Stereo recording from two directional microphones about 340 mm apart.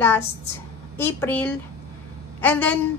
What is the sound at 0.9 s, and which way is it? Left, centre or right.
A woman's voice, centre.